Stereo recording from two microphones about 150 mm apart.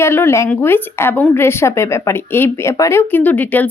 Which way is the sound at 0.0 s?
15° left (ahead or behind).